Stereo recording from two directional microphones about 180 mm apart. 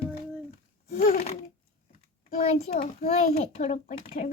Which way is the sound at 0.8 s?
40° left (ahead or behind).